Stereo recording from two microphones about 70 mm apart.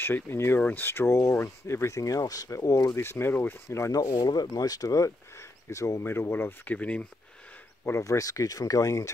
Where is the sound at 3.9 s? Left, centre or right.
Left.